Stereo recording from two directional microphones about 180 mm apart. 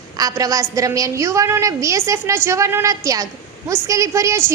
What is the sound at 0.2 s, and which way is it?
A woman's voice, 20° right (ahead or behind).